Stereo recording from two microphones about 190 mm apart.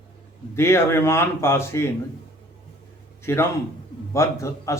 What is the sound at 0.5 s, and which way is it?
Speech, 15° left (ahead or behind).